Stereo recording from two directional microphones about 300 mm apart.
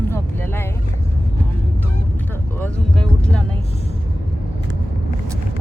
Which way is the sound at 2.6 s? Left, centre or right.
Centre.